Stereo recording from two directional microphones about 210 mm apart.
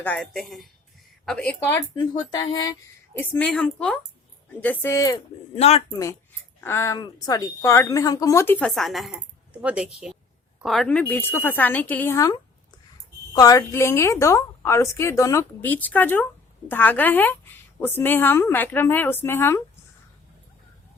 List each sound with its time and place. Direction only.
0.0 s speech: 5° left (ahead or behind)
2.0 s speech: 20° left (ahead or behind)
3.2 s a woman's voice: 5° left (ahead or behind)
5.5 s speech: 30° left (ahead or behind)
6.6 s a woman's voice: 10° left (ahead or behind)